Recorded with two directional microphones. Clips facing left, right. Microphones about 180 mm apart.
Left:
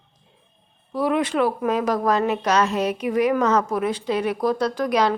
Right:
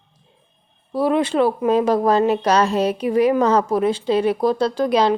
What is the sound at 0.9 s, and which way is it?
Speech, 30° right (ahead or behind).